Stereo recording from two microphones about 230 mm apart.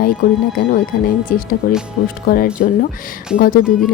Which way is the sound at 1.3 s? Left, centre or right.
Left.